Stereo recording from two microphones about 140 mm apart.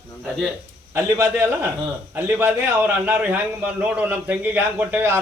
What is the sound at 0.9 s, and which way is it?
A man's voice, 20° right (ahead or behind).